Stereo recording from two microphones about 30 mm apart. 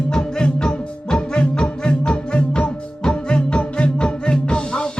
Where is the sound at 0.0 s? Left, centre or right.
Left.